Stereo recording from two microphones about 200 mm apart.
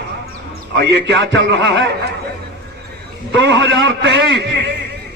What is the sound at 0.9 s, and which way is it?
Speech, 65° right (ahead or behind).